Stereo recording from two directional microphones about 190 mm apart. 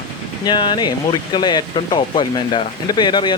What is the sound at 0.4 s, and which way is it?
Speech, 25° left (ahead or behind).